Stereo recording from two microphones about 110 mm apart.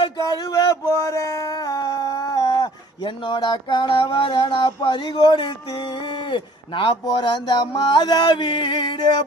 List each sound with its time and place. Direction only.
0.0 s a sound: 35° left (ahead or behind)
4.0 s mantra: 50° left (ahead or behind)
6.3 s a man's voice: 50° left (ahead or behind)
7.1 s mantra: 45° left (ahead or behind)